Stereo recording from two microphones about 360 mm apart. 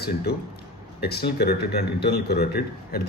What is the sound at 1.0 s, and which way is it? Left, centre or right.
Speech, left.